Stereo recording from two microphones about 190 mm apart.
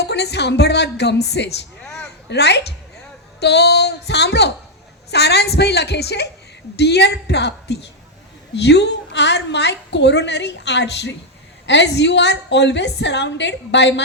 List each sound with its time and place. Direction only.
0.0 s a woman's voice: 60° left (ahead or behind)
1.8 s a sound: 5° left (ahead or behind)
2.3 s a woman's voice: 60° left (ahead or behind)